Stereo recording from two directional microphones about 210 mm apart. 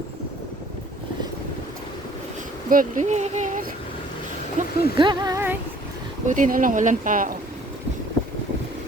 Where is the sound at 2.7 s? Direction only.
40° right (ahead or behind).